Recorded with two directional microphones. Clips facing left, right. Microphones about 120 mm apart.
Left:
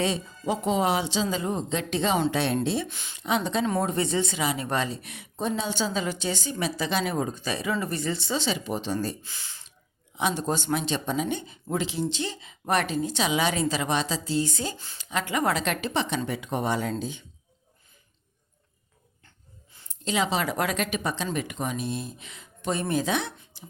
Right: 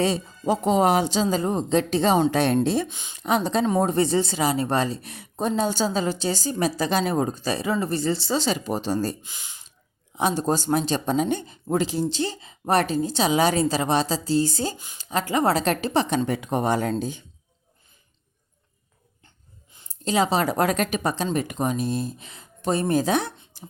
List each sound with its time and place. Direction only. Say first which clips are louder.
0.0 s a woman's voice: right 4 dB; 35° right (ahead or behind)
2.9 s speech: right 1 dB; 15° right (ahead or behind)
3.2 s a woman's voice: right 4 dB; 40° right (ahead or behind)
9.2 s speech: right 1 dB; 15° right (ahead or behind)
10.2 s a woman's voice: right 4 dB; 35° right (ahead or behind)
19.9 s a woman's voice: right 4 dB; 40° right (ahead or behind)
23.6 s beatboxing: right 4 dB; 45° right (ahead or behind)